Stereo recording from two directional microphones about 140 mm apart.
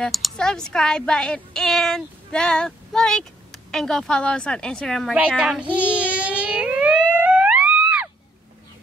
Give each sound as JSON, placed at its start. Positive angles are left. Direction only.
{"t": 0.0, "sound": "speech", "side_deg": 0}
{"t": 5.4, "sound": "a child's voice", "side_deg": -5}
{"t": 5.8, "sound": "music", "side_deg": -10}